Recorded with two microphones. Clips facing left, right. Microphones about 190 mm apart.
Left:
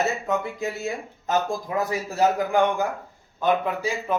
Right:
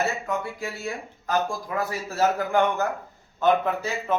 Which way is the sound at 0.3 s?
20° left (ahead or behind).